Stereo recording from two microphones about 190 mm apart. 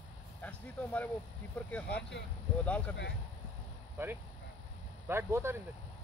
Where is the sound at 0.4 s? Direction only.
10° left (ahead or behind).